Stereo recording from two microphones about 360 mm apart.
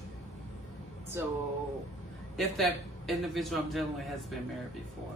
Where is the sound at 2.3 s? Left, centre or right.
Centre.